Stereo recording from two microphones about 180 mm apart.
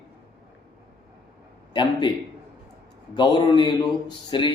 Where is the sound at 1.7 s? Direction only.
25° left (ahead or behind).